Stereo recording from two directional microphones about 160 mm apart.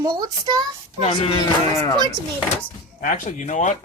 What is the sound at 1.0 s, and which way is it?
Speech, 35° left (ahead or behind).